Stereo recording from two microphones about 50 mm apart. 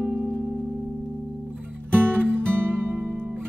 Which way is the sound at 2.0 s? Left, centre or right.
Right.